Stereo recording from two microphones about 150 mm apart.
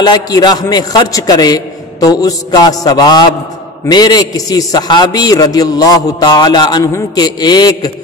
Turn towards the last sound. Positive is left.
turn(degrees=25)  # may be behind; listen again after turning